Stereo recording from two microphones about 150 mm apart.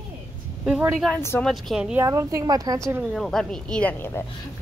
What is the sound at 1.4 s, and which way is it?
Speech, centre (ahead or behind).